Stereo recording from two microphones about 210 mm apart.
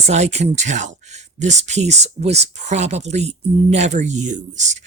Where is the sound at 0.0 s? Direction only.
35° right (ahead or behind).